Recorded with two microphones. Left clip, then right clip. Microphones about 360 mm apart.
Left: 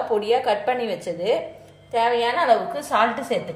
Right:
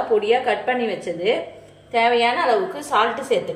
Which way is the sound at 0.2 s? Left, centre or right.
Left.